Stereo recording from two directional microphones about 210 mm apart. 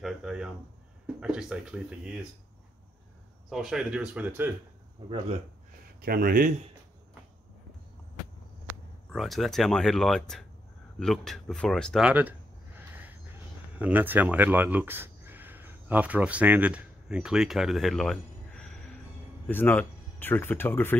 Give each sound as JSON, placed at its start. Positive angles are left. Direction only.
{"t": 0.0, "sound": "a sound", "side_deg": -5}
{"t": 1.2, "sound": "speech", "side_deg": -5}
{"t": 3.4, "sound": "speech", "side_deg": 0}
{"t": 5.9, "sound": "speech", "side_deg": -45}
{"t": 9.1, "sound": "speech", "side_deg": 0}